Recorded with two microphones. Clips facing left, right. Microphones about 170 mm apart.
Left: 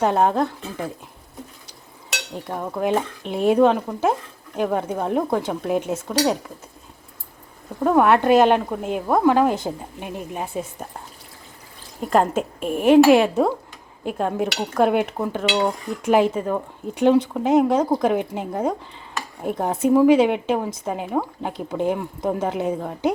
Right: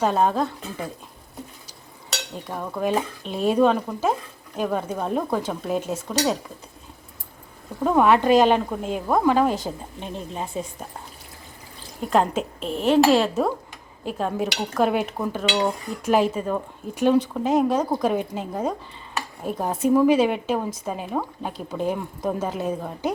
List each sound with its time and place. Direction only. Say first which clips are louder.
0.0 s speech: left 2 dB; 15° left (ahead or behind)
2.3 s speech: left 4 dB; 15° left (ahead or behind)
7.9 s speech: left 2 dB; 10° left (ahead or behind)
12.0 s speech: left 2 dB; centre (ahead or behind); by 22.9 s 15° left (ahead or behind)